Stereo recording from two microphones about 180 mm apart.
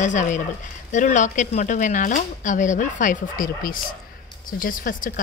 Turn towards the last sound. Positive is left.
turn(degrees=50)  # may be behind; listen again after turning